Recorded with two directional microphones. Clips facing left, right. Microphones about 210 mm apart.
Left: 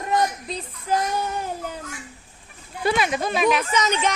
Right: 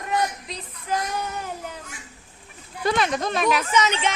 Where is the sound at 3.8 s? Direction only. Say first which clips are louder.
Even; 40° left (ahead or behind).